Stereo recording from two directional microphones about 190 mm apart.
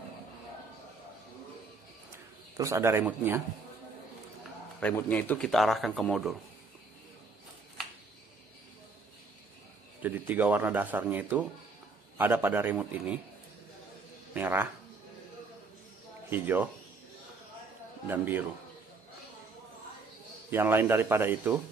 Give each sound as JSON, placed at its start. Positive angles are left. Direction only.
{"t": 2.5, "sound": "speech", "side_deg": -15}
{"t": 4.7, "sound": "speech", "side_deg": 10}
{"t": 10.0, "sound": "speech", "side_deg": -10}
{"t": 14.3, "sound": "speech", "side_deg": -10}
{"t": 16.3, "sound": "speech", "side_deg": -10}
{"t": 18.0, "sound": "speech", "side_deg": -10}
{"t": 20.5, "sound": "speech", "side_deg": -10}